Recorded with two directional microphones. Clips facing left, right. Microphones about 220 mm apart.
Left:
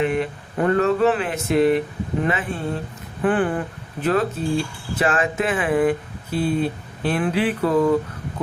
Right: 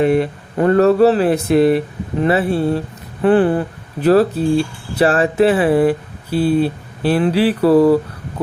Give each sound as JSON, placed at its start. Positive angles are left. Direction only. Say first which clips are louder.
{"t": 0.0, "sound": "speech", "louder": "right 7 dB", "side_deg": -40}